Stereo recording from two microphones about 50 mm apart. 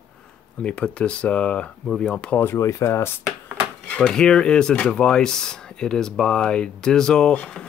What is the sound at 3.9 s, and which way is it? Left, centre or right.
Speech, left.